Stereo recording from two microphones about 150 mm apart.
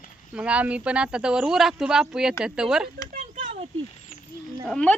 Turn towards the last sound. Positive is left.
turn(degrees=5)  # may be behind; listen again after turning